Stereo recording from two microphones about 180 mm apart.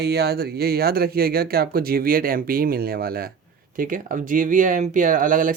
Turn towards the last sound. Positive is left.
turn(degrees=-45)  # may be behind; listen again after turning